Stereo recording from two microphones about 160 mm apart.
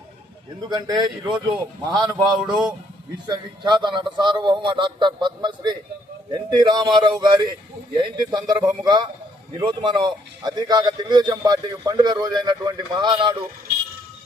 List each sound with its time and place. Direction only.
0.7 s a man's voice: 25° right (ahead or behind)